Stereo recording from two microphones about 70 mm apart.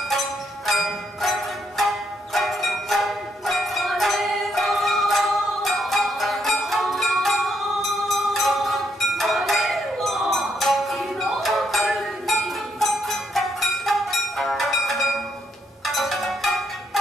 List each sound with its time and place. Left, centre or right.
0.1 s music: centre